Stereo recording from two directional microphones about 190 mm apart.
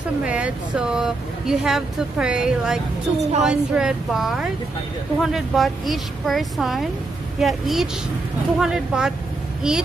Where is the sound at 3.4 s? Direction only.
5° right (ahead or behind).